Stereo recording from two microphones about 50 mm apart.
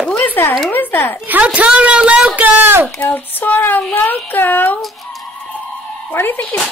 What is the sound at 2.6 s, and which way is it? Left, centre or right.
Speech, right.